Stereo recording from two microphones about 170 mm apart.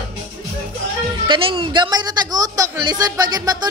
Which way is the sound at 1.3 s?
30° right (ahead or behind).